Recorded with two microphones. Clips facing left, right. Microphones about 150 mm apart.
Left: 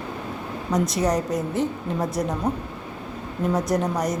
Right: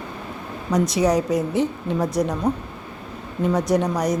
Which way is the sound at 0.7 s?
Centre (ahead or behind).